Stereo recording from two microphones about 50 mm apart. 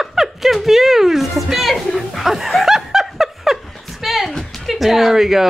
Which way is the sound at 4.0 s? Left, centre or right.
Centre.